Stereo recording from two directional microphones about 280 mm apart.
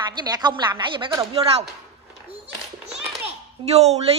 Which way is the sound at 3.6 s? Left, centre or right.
Centre.